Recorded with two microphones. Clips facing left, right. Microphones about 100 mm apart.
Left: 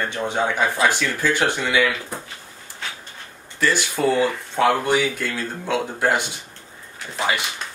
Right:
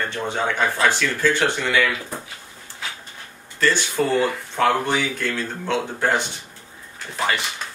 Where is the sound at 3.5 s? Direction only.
10° left (ahead or behind).